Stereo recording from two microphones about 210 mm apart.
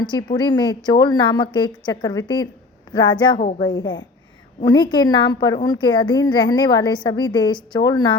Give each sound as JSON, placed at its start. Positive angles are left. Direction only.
{"t": 0.0, "sound": "a woman's voice", "side_deg": 20}